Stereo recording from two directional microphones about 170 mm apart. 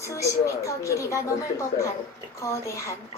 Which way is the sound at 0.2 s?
20° left (ahead or behind).